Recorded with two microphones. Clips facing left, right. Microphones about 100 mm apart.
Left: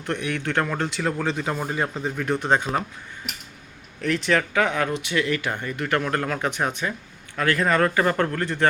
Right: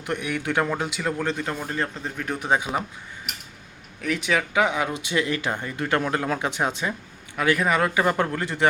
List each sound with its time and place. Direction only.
0.0 s speech: 10° right (ahead or behind)
4.0 s speech: 5° right (ahead or behind)
7.3 s speech: 10° right (ahead or behind)